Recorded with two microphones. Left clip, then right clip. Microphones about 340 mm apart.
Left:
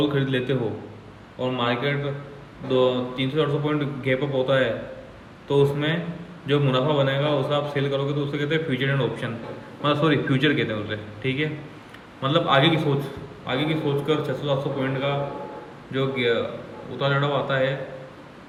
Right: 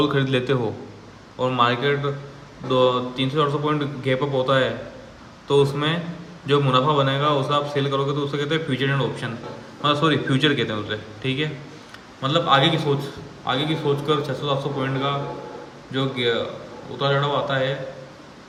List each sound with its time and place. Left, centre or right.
0.1 s speech: centre
17.0 s speech: centre